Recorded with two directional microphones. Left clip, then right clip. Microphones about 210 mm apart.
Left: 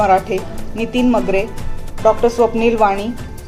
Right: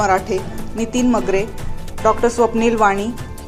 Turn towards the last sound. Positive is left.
turn(degrees=-20)  # may be behind; listen again after turning